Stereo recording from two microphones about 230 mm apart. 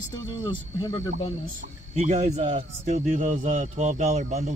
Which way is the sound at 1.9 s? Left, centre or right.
Right.